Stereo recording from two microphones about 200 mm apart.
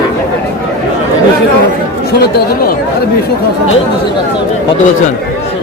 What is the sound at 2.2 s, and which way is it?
Speech, 55° left (ahead or behind).